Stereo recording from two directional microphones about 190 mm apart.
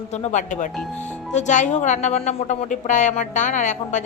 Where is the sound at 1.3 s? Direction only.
40° left (ahead or behind).